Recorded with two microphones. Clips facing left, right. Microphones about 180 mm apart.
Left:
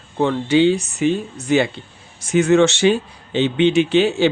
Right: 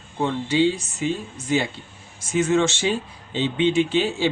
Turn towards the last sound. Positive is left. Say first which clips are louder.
# left 5 dB
turn(degrees=70)  # may be behind; listen again after turning